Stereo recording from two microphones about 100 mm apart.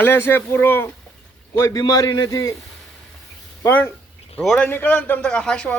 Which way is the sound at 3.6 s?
20° left (ahead or behind).